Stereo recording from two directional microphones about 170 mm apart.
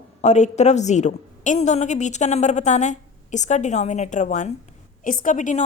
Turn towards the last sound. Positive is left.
turn(degrees=45)  # may be behind; listen again after turning